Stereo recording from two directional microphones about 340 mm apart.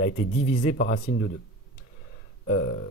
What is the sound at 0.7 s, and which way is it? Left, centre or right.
Speech, left.